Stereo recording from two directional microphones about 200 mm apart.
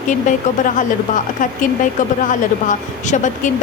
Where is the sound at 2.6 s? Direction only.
40° left (ahead or behind).